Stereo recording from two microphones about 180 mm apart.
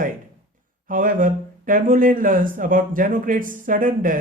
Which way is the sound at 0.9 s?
50° right (ahead or behind).